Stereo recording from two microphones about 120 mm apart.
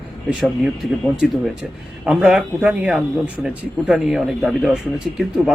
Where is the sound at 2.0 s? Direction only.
10° right (ahead or behind).